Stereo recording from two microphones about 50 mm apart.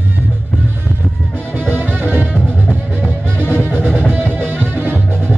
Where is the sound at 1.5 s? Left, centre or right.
Right.